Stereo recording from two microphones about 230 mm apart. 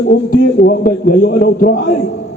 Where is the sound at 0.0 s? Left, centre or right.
Left.